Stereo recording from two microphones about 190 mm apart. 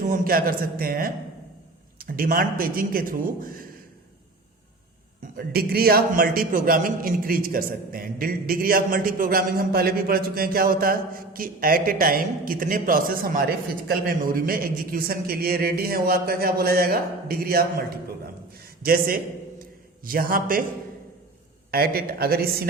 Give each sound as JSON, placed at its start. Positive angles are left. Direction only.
{"t": 0.0, "sound": "a man's voice", "side_deg": -45}
{"t": 5.4, "sound": "a man's voice", "side_deg": -55}
{"t": 21.7, "sound": "a man's voice", "side_deg": -55}